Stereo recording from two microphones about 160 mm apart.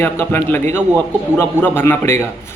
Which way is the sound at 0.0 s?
15° left (ahead or behind).